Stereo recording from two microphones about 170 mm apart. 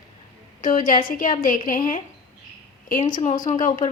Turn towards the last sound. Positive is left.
turn(degrees=50)  # may be behind; listen again after turning